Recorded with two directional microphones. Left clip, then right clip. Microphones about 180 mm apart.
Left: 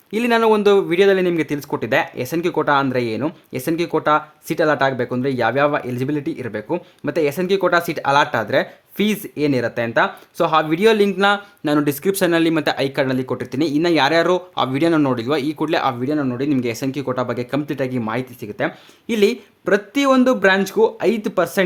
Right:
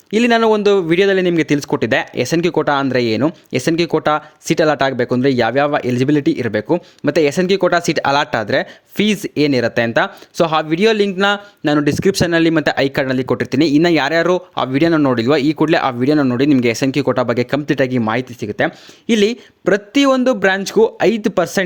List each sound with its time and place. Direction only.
0.1 s speech: 35° right (ahead or behind)
16.0 s speech: 50° right (ahead or behind); by 21.6 s 35° right (ahead or behind)